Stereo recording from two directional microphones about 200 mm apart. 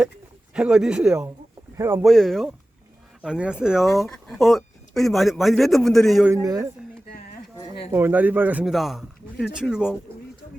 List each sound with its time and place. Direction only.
0.5 s a man's voice: 5° right (ahead or behind)
2.0 s a man's voice: centre (ahead or behind)
6.3 s speech: 15° right (ahead or behind)
7.1 s a sound: 50° left (ahead or behind)
7.9 s a man's voice: 10° right (ahead or behind)